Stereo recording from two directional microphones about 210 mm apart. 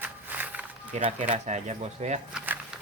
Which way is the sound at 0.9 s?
35° right (ahead or behind).